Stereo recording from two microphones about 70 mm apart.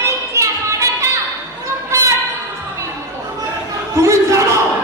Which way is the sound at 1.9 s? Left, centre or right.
Right.